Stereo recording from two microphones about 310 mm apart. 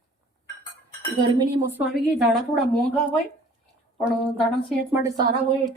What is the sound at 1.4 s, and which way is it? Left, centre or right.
Speech, centre.